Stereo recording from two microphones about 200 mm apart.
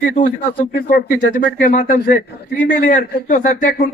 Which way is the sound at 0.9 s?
45° left (ahead or behind).